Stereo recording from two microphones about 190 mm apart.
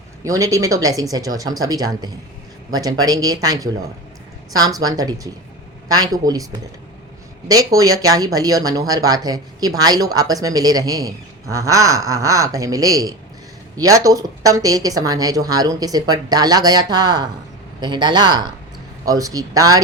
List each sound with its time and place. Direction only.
0.3 s speech: 15° right (ahead or behind)